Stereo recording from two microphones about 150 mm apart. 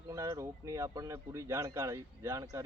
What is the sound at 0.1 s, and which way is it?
Speech, 20° right (ahead or behind).